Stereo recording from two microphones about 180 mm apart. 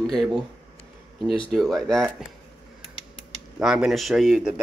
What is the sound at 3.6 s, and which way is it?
Speech, centre (ahead or behind).